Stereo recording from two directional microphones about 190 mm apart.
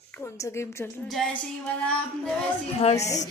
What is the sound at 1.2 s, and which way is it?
Music, centre (ahead or behind).